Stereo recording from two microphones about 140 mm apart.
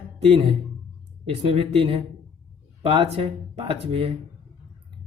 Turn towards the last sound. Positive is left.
turn(degrees=-45)  # may be behind; listen again after turning